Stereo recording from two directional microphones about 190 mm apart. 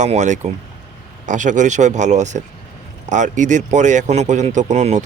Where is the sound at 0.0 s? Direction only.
40° right (ahead or behind).